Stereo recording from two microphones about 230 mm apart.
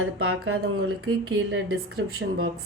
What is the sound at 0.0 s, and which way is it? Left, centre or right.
A woman's voice, right.